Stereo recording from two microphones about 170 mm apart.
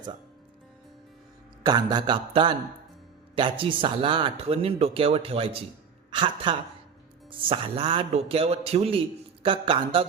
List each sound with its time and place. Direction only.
1.6 s a man's voice: 25° right (ahead or behind)